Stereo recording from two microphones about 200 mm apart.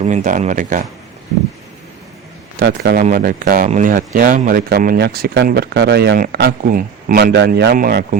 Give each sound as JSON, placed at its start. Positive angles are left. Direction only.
{"t": 0.0, "sound": "speech", "side_deg": -35}
{"t": 2.6, "sound": "speech", "side_deg": -50}
{"t": 7.3, "sound": "speech", "side_deg": -60}